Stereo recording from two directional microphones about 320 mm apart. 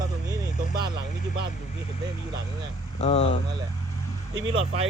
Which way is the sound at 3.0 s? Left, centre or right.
Centre.